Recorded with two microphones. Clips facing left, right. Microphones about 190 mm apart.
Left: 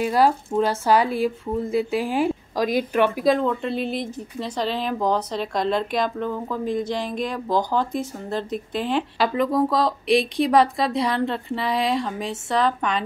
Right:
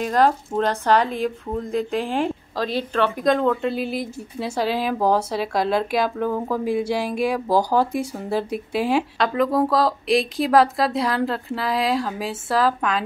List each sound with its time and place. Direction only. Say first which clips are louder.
0.0 s speech: even; 10° left (ahead or behind)
3.3 s a woman's voice: right 1 dB; centre (ahead or behind)